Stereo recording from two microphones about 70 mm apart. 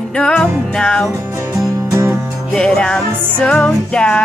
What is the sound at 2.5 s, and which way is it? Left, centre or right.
Music, centre.